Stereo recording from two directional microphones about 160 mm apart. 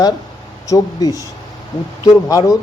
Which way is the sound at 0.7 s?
20° left (ahead or behind).